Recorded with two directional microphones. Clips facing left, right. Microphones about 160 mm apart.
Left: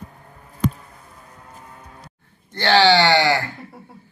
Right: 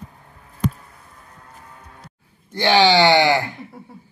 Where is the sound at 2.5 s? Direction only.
15° right (ahead or behind).